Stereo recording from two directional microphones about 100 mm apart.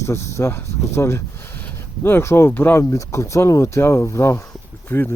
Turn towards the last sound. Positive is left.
turn(degrees=20)  # may be behind; listen again after turning